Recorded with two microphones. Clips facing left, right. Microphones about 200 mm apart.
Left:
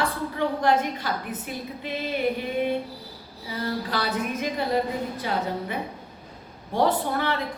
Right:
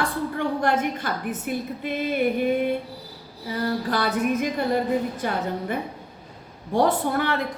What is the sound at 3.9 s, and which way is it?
A woman's voice, 50° right (ahead or behind).